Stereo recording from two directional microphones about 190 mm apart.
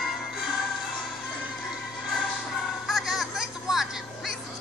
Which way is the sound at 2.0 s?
Centre (ahead or behind).